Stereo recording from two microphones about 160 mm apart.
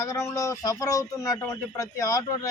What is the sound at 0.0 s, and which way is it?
A man's voice, 20° left (ahead or behind).